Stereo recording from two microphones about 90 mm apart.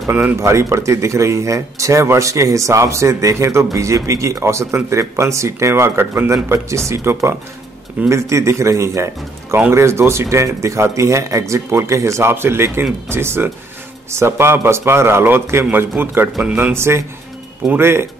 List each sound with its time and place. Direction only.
0.4 s a man's voice: 35° right (ahead or behind)